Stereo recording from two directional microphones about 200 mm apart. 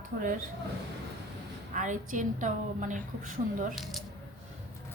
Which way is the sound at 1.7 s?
40° right (ahead or behind).